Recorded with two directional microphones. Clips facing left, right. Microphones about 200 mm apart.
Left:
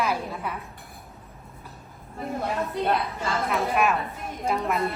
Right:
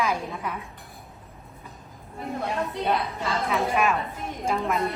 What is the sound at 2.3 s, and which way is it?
A woman's voice, centre (ahead or behind).